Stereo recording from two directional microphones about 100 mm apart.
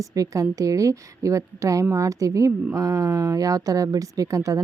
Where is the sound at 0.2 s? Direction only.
35° right (ahead or behind).